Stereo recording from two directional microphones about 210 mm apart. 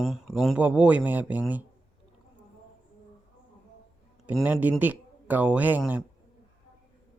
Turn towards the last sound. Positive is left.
turn(degrees=-5)  # may be behind; listen again after turning